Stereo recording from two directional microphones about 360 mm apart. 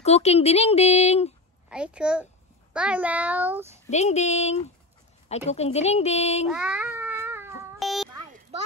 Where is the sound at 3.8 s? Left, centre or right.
Centre.